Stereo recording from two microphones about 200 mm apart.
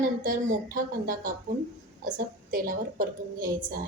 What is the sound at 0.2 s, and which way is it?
Speech, 40° right (ahead or behind).